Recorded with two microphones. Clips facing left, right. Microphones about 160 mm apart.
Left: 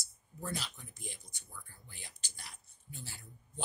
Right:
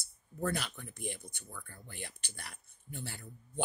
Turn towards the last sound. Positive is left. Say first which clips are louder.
# right 6 dB
turn(degrees=-60)  # may be behind; listen again after turning